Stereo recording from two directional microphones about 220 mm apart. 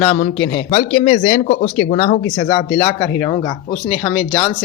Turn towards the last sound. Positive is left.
turn(degrees=15)  # may be behind; listen again after turning